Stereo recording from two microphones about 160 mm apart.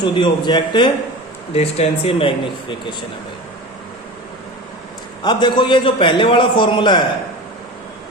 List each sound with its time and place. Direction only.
0.0 s speech: 30° left (ahead or behind)
1.5 s a man's voice: 40° left (ahead or behind)
5.2 s a man's voice: 30° left (ahead or behind)